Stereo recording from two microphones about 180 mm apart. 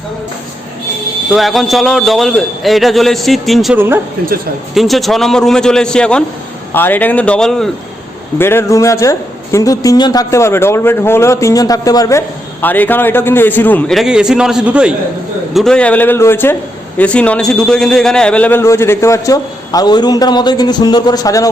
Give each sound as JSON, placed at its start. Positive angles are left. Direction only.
{"t": 1.3, "sound": "a man's voice", "side_deg": 0}
{"t": 3.8, "sound": "speech", "side_deg": -10}
{"t": 4.7, "sound": "a man's voice", "side_deg": 0}
{"t": 8.4, "sound": "a man's voice", "side_deg": 15}